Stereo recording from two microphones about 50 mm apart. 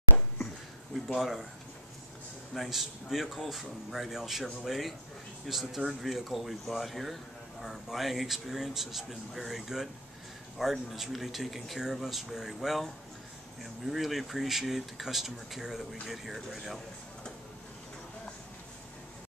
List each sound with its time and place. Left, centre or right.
1.0 s speech: centre
2.5 s speech: centre